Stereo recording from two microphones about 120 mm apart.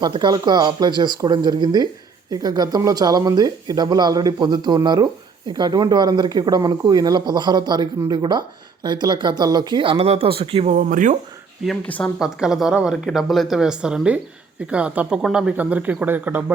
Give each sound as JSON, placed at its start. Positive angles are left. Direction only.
{"t": 0.0, "sound": "speech", "side_deg": -40}
{"t": 11.9, "sound": "speech", "side_deg": 15}
{"t": 12.2, "sound": "speech", "side_deg": -5}